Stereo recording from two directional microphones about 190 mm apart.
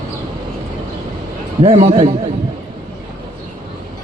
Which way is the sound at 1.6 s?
30° right (ahead or behind).